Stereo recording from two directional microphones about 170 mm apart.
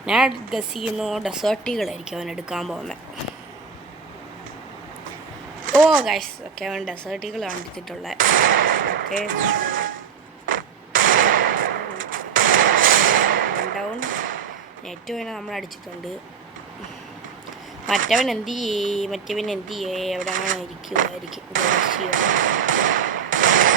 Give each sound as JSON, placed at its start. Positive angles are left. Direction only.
{"t": 0.0, "sound": "speech", "side_deg": 0}
{"t": 6.1, "sound": "speech", "side_deg": 0}
{"t": 8.2, "sound": "a sound", "side_deg": -55}
{"t": 13.9, "sound": "drawer open or close", "side_deg": -55}
{"t": 14.8, "sound": "speech", "side_deg": 0}
{"t": 18.3, "sound": "speech", "side_deg": 0}
{"t": 20.1, "sound": "speech", "side_deg": -50}